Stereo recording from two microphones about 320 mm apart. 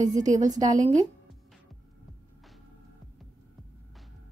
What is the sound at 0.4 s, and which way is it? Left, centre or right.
Speech, centre.